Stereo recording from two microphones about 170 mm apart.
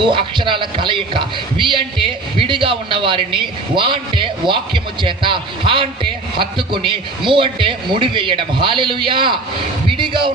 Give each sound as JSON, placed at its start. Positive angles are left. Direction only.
{"t": 0.0, "sound": "speech", "side_deg": -30}